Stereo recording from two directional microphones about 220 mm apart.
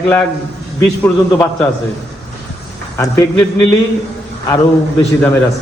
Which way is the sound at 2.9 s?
15° left (ahead or behind).